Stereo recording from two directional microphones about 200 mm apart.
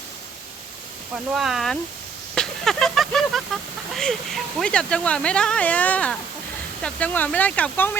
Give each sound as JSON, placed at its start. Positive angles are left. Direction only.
{"t": 1.1, "sound": "speech", "side_deg": 0}